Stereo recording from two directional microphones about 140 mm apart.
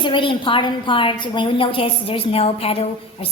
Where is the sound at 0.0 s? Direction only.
35° left (ahead or behind).